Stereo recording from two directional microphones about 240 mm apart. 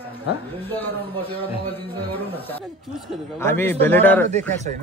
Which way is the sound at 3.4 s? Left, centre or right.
Centre.